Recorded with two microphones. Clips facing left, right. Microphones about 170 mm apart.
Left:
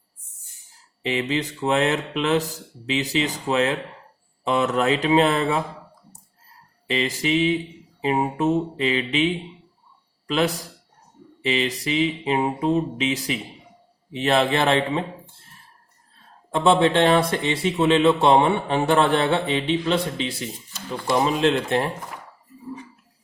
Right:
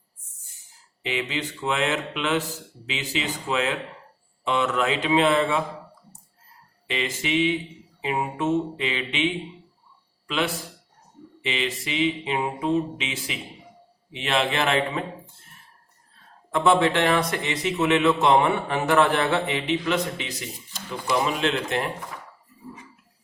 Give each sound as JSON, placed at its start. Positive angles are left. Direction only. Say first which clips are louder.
{"t": 1.0, "sound": "speech", "louder": "left 4 dB", "side_deg": 40}
{"t": 6.8, "sound": "a man's voice", "louder": "left 5 dB", "side_deg": 35}
{"t": 16.5, "sound": "speech", "louder": "left 2 dB", "side_deg": 25}